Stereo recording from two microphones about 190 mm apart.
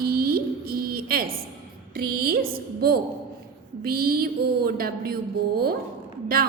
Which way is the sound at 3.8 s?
50° right (ahead or behind).